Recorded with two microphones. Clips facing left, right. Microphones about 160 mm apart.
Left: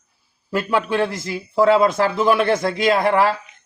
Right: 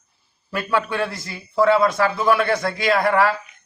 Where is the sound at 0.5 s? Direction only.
25° left (ahead or behind).